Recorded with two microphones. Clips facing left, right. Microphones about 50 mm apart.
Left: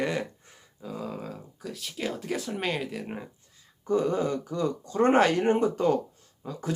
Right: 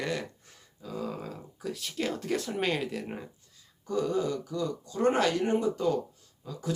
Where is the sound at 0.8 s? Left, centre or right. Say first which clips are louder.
Even; centre.